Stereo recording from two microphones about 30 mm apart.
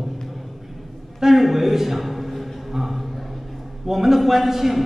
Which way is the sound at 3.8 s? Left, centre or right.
Centre.